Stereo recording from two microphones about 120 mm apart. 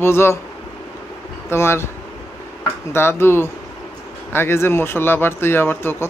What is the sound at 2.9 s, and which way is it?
Speech, 20° left (ahead or behind).